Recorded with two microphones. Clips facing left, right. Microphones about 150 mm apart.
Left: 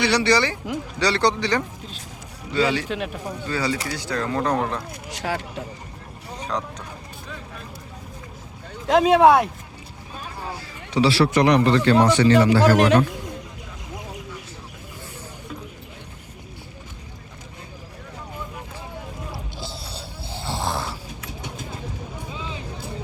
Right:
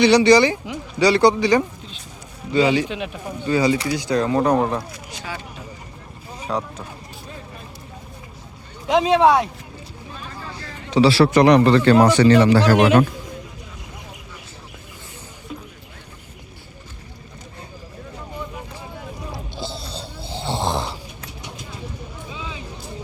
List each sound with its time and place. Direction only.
0.0 s speech: 15° right (ahead or behind)
2.9 s speech: centre (ahead or behind)
3.4 s speech: 15° right (ahead or behind)
5.2 s speech: 75° left (ahead or behind)
6.4 s speech: 10° right (ahead or behind)
8.9 s speech: 5° left (ahead or behind)
11.0 s speech: 30° right (ahead or behind)
12.5 s a man's voice: 45° left (ahead or behind)
19.8 s vehicle: 10° left (ahead or behind)
20.5 s a sound: 20° right (ahead or behind)
21.2 s vehicle: 50° left (ahead or behind)